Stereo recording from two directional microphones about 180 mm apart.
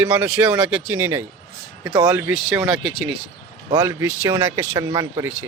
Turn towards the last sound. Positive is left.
turn(degrees=-25)  # may be behind; listen again after turning